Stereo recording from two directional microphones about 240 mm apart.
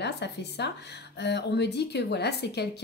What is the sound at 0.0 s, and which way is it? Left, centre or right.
A woman's voice, left.